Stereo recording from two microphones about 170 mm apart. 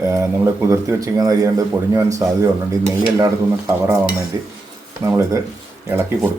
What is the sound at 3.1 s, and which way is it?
Speech, 15° right (ahead or behind).